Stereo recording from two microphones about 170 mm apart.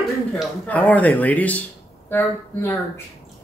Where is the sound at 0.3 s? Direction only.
10° left (ahead or behind).